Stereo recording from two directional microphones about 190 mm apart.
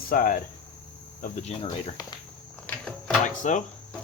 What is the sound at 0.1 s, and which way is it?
Cricket, 45° left (ahead or behind).